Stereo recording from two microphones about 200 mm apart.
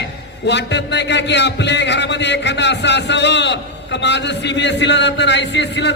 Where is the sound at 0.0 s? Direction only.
60° left (ahead or behind).